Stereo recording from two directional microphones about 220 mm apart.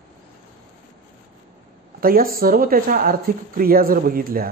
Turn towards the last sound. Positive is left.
turn(degrees=-40)  # may be behind; listen again after turning